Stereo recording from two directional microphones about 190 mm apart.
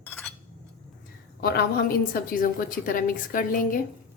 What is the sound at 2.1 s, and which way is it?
A woman's voice, 45° left (ahead or behind).